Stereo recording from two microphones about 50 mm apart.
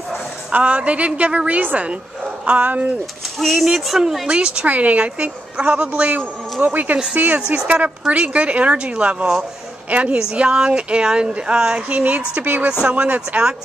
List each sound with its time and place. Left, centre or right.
0.5 s a woman's voice: right
3.3 s speech: centre
4.3 s a woman's voice: centre
6.6 s a woman's voice: right; by 11.8 s centre
11.9 s a woman's voice: right